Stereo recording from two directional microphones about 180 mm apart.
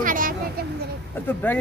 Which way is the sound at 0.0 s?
50° right (ahead or behind).